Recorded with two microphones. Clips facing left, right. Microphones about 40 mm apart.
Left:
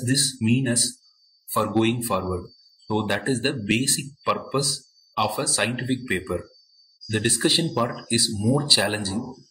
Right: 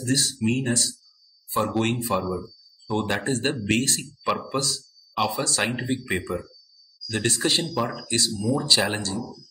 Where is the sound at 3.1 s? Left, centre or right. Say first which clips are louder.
Left 1 dB; centre.